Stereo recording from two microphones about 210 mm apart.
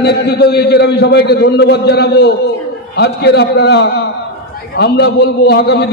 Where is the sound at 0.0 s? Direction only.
50° left (ahead or behind).